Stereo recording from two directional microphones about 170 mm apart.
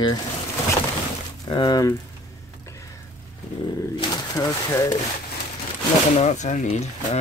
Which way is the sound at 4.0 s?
25° left (ahead or behind).